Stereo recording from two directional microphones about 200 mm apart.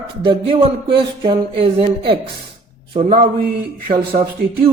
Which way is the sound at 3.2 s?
45° right (ahead or behind).